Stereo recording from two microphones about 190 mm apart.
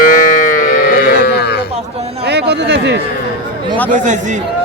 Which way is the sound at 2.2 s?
60° right (ahead or behind).